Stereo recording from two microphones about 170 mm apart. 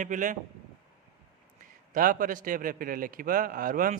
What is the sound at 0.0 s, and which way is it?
Speech, 50° right (ahead or behind).